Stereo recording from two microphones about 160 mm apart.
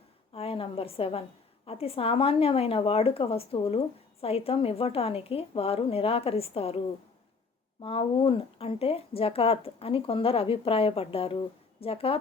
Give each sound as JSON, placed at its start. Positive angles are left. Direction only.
{"t": 0.3, "sound": "a woman's voice", "side_deg": 35}